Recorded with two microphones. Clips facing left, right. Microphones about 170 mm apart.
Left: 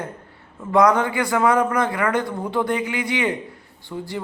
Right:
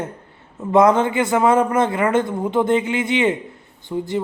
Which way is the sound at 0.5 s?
25° right (ahead or behind).